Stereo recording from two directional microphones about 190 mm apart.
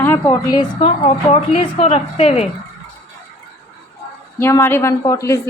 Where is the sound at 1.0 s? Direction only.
30° left (ahead or behind).